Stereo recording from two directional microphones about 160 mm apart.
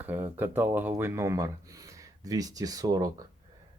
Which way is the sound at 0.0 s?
10° right (ahead or behind).